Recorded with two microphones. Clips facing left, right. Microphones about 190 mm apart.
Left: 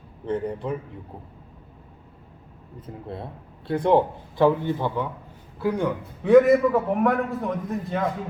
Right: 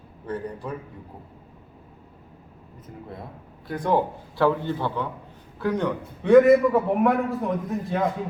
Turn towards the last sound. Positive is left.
turn(degrees=0)  # may be behind; listen again after turning